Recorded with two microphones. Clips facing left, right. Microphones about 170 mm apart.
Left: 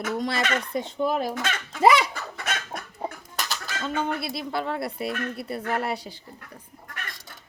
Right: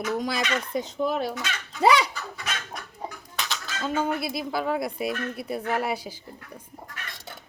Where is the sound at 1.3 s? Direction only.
50° left (ahead or behind).